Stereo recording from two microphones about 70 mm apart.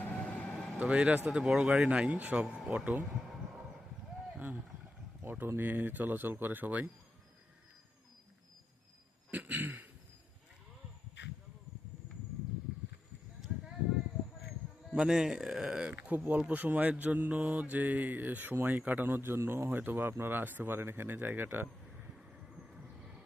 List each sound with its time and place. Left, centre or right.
0.0 s vehicle: centre
0.8 s speech: centre
3.1 s a sound: centre
5.2 s speech: right
9.3 s a sound: right
14.9 s speech: centre; by 21.7 s right
22.7 s vehicle: centre